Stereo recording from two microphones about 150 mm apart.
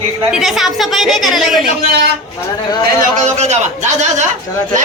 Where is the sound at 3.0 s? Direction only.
50° right (ahead or behind).